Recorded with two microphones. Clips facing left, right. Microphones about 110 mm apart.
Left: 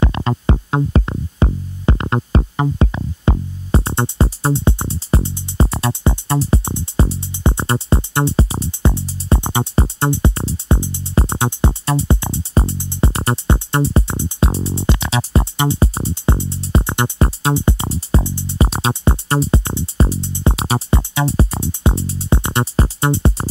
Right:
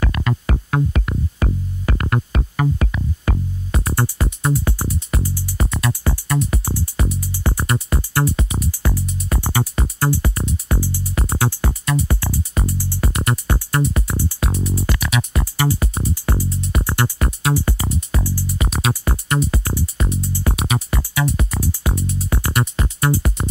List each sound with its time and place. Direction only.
0.0 s music: 30° left (ahead or behind)